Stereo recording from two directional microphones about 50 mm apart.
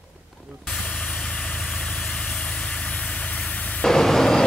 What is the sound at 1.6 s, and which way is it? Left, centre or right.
Vehicle, centre.